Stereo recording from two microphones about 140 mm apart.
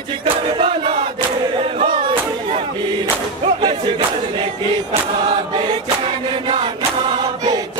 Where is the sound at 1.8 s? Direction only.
35° right (ahead or behind).